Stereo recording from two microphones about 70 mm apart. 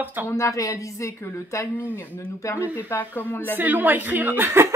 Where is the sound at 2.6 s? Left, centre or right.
Right.